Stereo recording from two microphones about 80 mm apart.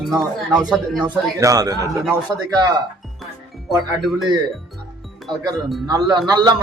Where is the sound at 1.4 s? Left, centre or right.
Right.